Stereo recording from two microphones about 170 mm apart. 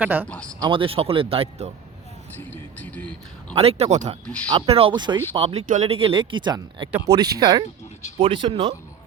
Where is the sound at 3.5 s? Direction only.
35° right (ahead or behind).